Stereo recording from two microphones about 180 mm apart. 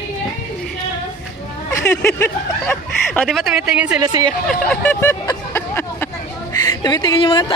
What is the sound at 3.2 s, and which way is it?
Speech, 5° right (ahead or behind).